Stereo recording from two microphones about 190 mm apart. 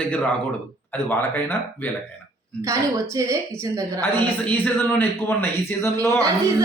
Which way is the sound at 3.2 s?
15° right (ahead or behind).